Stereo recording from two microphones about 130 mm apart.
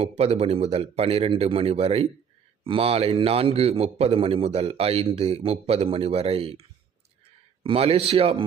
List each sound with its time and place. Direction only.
0.0 s a man's voice: 55° right (ahead or behind)